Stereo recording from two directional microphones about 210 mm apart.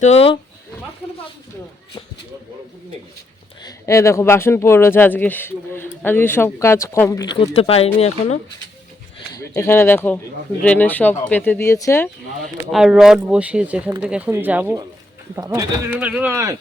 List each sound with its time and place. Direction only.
0.0 s speech: 30° left (ahead or behind)
3.6 s speech: 15° left (ahead or behind); by 8.4 s 30° left (ahead or behind)
9.4 s speech: 15° left (ahead or behind)
12.7 s speech: centre (ahead or behind)